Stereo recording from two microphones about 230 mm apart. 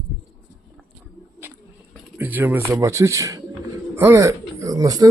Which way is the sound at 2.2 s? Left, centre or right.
Centre.